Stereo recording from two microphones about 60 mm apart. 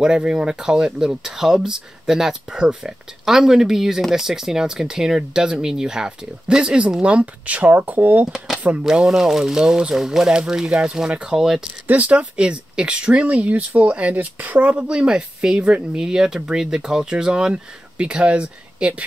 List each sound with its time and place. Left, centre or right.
0.0 s speech: centre; by 8.3 s right
8.8 s speech: centre
11.9 s speech: right